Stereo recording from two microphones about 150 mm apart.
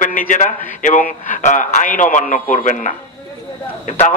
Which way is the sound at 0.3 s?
60° left (ahead or behind).